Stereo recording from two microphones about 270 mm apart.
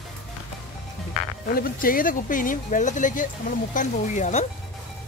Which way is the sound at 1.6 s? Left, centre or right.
Left.